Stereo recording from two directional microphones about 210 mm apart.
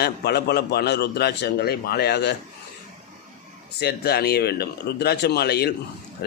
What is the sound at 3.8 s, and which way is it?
A man's voice, 50° left (ahead or behind).